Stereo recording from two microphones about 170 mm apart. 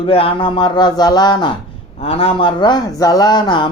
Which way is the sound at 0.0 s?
35° left (ahead or behind).